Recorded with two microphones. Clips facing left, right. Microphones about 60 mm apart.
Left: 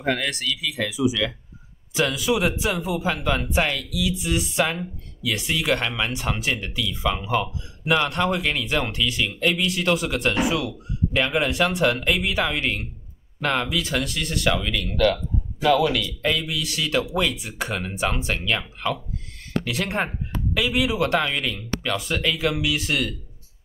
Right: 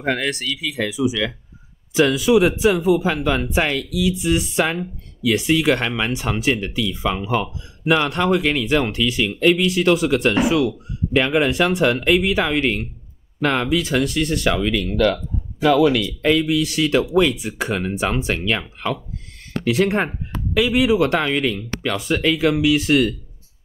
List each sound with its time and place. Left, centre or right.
0.0 s speech: right
2.1 s speech: right
9.4 s speech: right
9.7 s speech: right
21.9 s speech: right